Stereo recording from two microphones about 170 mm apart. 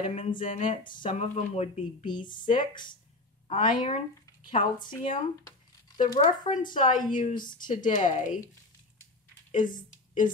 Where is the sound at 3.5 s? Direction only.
30° left (ahead or behind).